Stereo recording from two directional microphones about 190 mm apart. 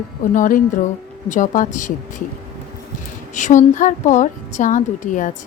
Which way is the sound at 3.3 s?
40° left (ahead or behind).